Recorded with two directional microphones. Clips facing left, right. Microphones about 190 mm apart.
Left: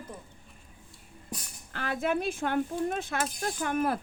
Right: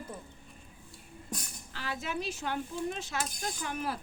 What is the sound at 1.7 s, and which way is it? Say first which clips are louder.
Speech: left 8 dB; 55° left (ahead or behind).